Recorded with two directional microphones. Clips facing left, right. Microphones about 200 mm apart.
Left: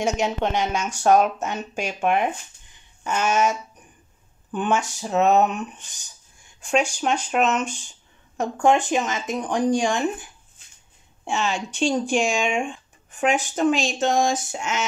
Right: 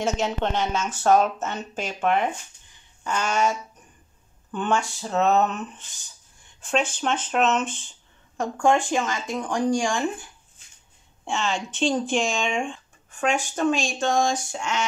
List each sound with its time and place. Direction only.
0.0 s speech: 15° left (ahead or behind)
3.0 s a sound: 20° left (ahead or behind)
4.5 s speech: 15° left (ahead or behind)
8.4 s speech: 20° left (ahead or behind)
11.2 s speech: 15° left (ahead or behind)